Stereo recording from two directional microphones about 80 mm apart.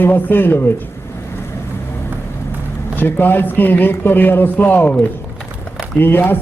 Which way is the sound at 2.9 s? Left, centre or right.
Left.